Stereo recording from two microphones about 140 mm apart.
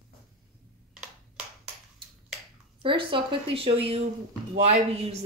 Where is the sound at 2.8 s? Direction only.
40° right (ahead or behind).